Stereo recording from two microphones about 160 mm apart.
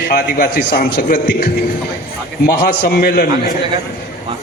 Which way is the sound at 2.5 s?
70° left (ahead or behind).